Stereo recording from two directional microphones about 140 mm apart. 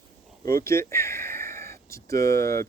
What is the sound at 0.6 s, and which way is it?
Speech, 20° left (ahead or behind).